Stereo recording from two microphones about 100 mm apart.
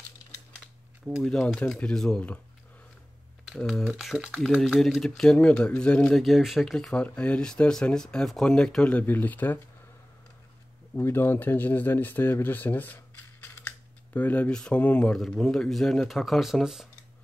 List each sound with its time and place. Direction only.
1.2 s speech: 10° left (ahead or behind)
3.4 s speech: centre (ahead or behind)
4.4 s speech: 5° left (ahead or behind)
6.2 s speech: centre (ahead or behind); by 9.6 s 20° left (ahead or behind)
11.0 s speech: 25° left (ahead or behind)
15.1 s speech: 5° left (ahead or behind)